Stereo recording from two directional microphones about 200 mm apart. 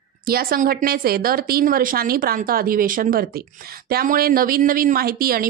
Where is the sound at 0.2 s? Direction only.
45° right (ahead or behind).